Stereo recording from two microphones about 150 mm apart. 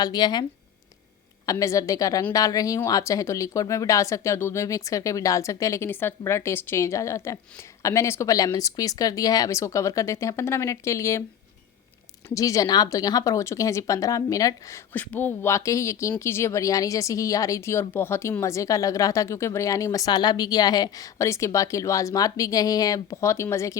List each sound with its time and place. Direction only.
0.0 s speech: 30° left (ahead or behind)
1.5 s speech: 20° left (ahead or behind)
12.3 s speech: 20° left (ahead or behind)
14.9 s speech: 10° left (ahead or behind)